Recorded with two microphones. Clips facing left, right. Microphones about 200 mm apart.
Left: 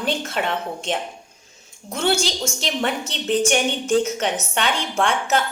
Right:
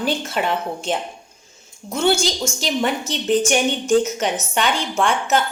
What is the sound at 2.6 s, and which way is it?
A woman's voice, 5° right (ahead or behind).